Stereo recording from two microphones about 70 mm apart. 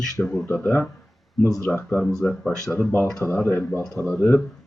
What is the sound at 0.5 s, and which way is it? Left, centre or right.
Speech, left.